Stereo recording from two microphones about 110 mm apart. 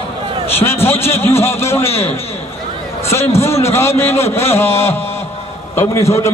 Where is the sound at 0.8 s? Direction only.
20° left (ahead or behind).